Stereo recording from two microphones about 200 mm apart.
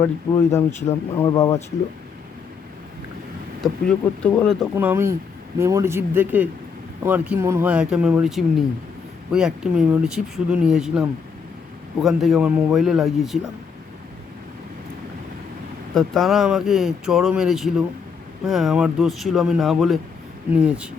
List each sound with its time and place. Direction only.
0.5 s speech: 15° left (ahead or behind)
3.6 s speech: 5° left (ahead or behind)
4.7 s speech: 10° right (ahead or behind)
12.0 s speech: centre (ahead or behind)
16.0 s speech: centre (ahead or behind)